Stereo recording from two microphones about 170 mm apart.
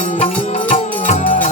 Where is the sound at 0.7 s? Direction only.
50° left (ahead or behind).